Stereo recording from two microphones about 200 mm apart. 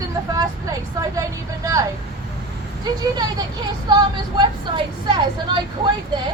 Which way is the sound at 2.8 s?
20° right (ahead or behind).